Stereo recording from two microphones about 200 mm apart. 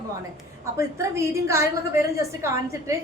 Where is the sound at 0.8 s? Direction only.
15° right (ahead or behind).